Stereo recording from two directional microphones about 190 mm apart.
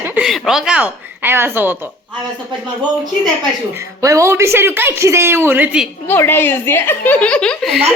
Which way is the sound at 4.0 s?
15° right (ahead or behind).